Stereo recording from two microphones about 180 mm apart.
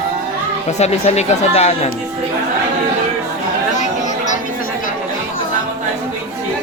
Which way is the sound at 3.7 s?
40° left (ahead or behind).